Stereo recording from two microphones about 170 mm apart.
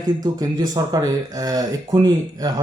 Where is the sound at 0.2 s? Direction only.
20° right (ahead or behind).